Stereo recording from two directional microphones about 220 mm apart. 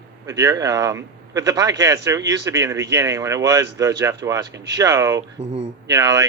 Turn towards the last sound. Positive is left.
turn(degrees=-15)  # may be behind; listen again after turning